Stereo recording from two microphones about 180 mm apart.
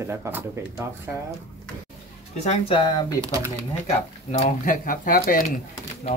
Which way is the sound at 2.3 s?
35° left (ahead or behind).